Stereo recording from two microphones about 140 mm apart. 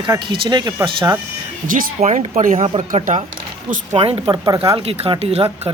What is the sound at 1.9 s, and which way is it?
Speech, 55° right (ahead or behind).